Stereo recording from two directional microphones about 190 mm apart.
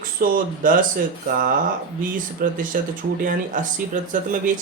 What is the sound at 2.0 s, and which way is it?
Speech, 45° right (ahead or behind).